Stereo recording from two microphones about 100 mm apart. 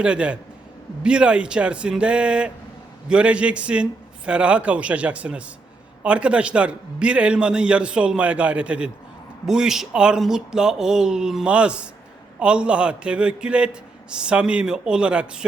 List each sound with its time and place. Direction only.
0.0 s a man's voice: 10° right (ahead or behind)